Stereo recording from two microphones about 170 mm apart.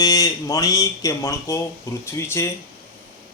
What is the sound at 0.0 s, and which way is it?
Speech, 20° left (ahead or behind).